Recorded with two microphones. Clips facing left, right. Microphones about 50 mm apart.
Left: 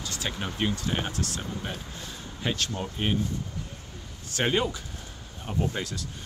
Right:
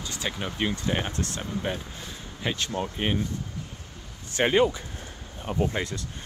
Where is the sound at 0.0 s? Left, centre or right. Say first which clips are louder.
Right 1 dB; centre.